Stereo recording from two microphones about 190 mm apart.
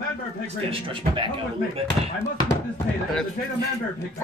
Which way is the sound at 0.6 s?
30° right (ahead or behind).